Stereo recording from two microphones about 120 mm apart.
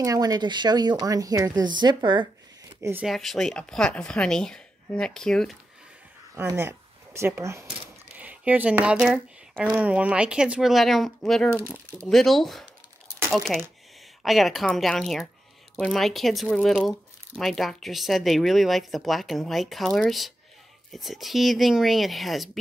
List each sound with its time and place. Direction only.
0.0 s a woman's voice: 30° right (ahead or behind)
3.0 s speech: centre (ahead or behind)
6.3 s speech: 20° right (ahead or behind); by 11.5 s 5° left (ahead or behind)
11.6 s speech: 15° left (ahead or behind)
12.1 s speech: centre (ahead or behind)
15.7 s speech: 15° left (ahead or behind)
16.0 s speech: centre (ahead or behind)